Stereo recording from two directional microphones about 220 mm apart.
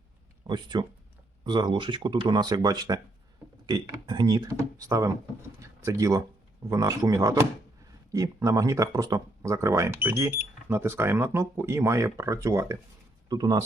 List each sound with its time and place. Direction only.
0.4 s speech: 20° right (ahead or behind)